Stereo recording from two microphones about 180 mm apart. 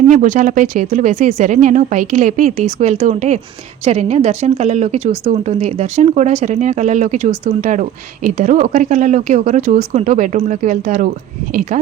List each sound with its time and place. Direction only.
0.1 s a woman's voice: 45° right (ahead or behind)